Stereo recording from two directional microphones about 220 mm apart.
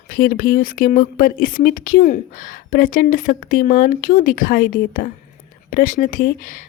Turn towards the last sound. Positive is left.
turn(degrees=35)  # may be behind; listen again after turning